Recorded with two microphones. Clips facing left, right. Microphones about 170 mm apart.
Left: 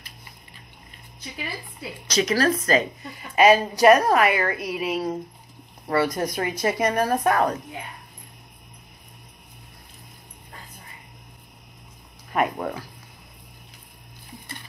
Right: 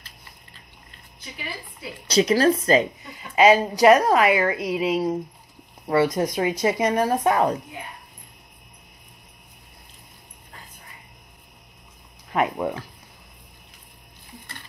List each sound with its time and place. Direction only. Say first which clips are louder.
2.0 s a woman's voice: right 3 dB; 30° right (ahead or behind)
12.3 s speech: right 1 dB; 15° right (ahead or behind)